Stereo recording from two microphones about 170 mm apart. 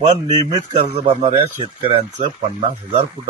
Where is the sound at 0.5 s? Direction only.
40° right (ahead or behind).